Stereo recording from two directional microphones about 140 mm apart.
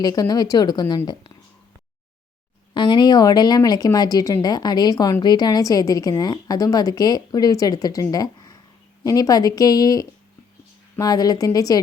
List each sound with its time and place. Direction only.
0.0 s a woman's voice: 30° left (ahead or behind)
2.7 s a woman's voice: 35° left (ahead or behind)